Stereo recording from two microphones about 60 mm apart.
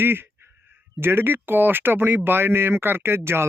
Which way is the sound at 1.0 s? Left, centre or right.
Right.